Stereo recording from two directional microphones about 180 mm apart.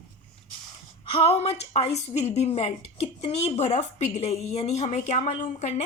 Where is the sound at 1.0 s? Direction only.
30° left (ahead or behind).